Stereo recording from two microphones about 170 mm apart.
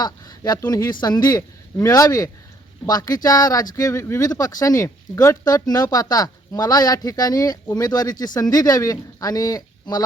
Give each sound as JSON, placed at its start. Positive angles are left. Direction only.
{"t": 0.0, "sound": "speech", "side_deg": 25}